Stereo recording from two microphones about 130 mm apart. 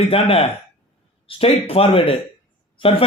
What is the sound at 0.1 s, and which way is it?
A man's voice, 45° left (ahead or behind).